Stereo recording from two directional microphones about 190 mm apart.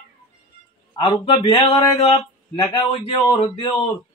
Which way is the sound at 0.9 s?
30° left (ahead or behind).